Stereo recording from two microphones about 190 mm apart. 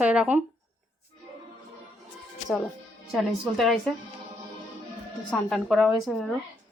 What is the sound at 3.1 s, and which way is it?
Speech, centre (ahead or behind).